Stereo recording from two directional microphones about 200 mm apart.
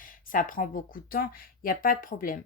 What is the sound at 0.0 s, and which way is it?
Speech, 40° left (ahead or behind).